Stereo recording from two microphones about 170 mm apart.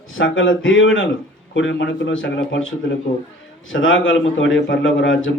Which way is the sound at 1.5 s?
90° left.